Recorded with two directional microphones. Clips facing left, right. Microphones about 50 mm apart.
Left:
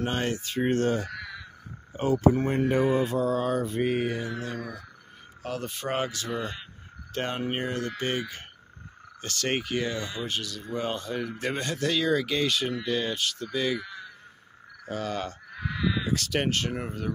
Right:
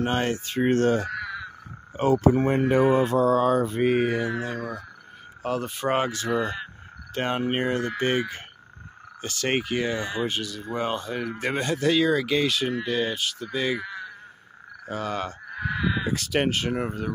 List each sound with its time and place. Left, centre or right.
0.0 s speech: right
0.7 s speech: right
1.0 s caw: right
2.0 s speech: right
2.4 s speech: right
5.4 s speech: right
6.4 s speech: right
7.2 s speech: right
9.2 s speech: centre
13.5 s speech: right
15.5 s a sound: right
16.1 s speech: centre